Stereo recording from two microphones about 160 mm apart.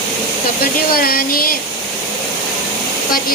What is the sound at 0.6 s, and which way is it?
Speech, 70° left (ahead or behind).